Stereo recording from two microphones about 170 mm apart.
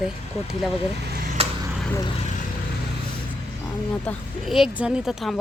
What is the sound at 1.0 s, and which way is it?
Vehicle, 65° right (ahead or behind).